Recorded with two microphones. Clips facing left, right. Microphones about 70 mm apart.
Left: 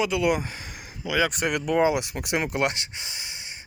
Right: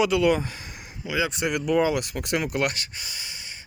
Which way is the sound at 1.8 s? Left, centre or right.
Centre.